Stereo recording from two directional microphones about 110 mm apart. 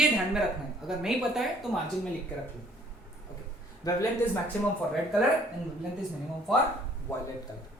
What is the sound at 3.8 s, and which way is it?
Speech, 35° left (ahead or behind).